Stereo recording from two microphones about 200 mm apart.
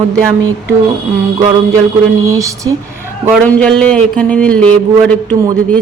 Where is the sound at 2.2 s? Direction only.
15° right (ahead or behind).